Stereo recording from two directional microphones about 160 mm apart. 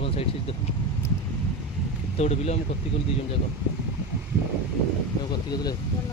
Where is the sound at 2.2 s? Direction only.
45° left (ahead or behind).